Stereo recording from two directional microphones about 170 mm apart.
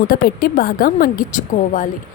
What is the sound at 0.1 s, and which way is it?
A woman's voice, 60° left (ahead or behind).